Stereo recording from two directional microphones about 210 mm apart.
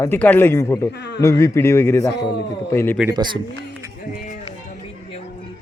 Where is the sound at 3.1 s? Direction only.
20° right (ahead or behind).